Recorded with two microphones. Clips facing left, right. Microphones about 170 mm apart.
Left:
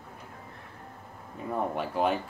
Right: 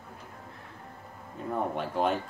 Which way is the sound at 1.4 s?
5° left (ahead or behind).